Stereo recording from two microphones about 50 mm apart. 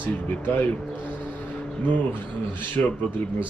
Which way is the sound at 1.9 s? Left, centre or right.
Left.